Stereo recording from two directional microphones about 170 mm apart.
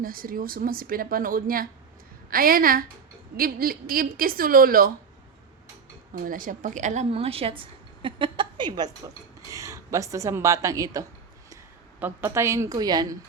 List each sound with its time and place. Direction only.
0.0 s a woman's voice: 55° right (ahead or behind)
6.2 s a woman's voice: 55° right (ahead or behind); by 13.1 s 25° right (ahead or behind)